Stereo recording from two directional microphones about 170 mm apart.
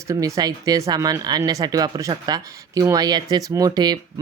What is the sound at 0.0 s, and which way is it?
Speech, 20° right (ahead or behind).